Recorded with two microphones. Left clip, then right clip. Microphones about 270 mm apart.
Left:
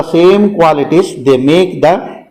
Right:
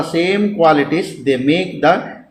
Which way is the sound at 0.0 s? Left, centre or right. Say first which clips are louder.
Left 9 dB; left.